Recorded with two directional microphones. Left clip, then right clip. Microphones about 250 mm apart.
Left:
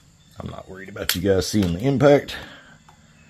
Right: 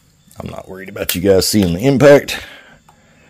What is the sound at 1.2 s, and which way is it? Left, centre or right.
Speech, right.